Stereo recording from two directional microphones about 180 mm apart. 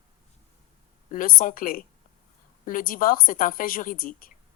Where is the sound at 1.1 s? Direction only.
50° left (ahead or behind).